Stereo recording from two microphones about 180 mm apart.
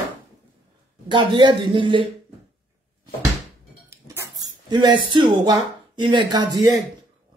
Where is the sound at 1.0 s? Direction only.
25° right (ahead or behind).